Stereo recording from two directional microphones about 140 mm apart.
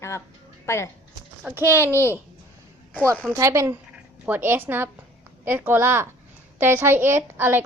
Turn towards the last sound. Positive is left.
turn(degrees=-15)  # may be behind; listen again after turning